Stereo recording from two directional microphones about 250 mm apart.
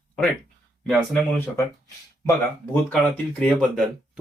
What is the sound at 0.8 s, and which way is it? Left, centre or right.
Speech, centre.